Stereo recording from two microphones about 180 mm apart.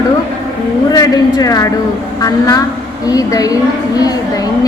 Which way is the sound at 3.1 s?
20° left (ahead or behind).